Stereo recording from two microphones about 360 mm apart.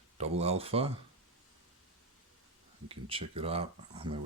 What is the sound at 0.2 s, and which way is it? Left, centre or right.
Speech, centre.